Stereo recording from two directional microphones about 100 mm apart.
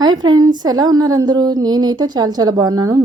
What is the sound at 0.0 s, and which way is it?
Speech, 45° right (ahead or behind).